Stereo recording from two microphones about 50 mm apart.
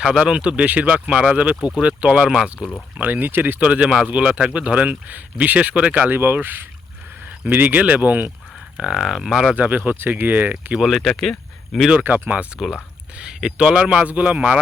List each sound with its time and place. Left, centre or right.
0.2 s a man's voice: right
2.2 s speech: centre
3.0 s speech: right
3.6 s a man's voice: right
6.1 s speech: right
8.8 s speech: centre
9.6 s speech: right
10.8 s speech: centre
12.0 s speech: right
13.1 s speech: centre
14.1 s a man's voice: right